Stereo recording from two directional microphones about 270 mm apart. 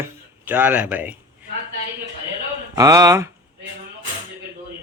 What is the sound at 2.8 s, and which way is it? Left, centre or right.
Speech, centre.